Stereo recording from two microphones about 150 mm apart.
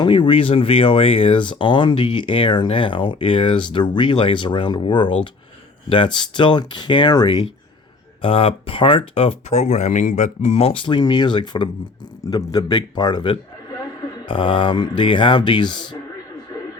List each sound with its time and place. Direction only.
0.0 s a man's voice: 35° left (ahead or behind)